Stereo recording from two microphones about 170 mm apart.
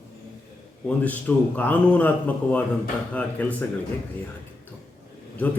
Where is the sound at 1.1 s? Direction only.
10° left (ahead or behind).